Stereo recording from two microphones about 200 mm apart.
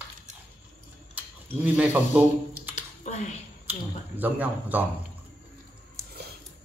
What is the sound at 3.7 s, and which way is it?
Speech, 10° right (ahead or behind).